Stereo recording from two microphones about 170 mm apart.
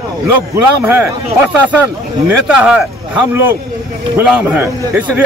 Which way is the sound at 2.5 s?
5° right (ahead or behind).